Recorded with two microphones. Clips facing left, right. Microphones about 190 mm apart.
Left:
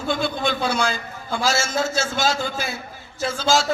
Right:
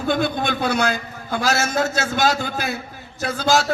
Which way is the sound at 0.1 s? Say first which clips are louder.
Right 2 dB; 50° right (ahead or behind).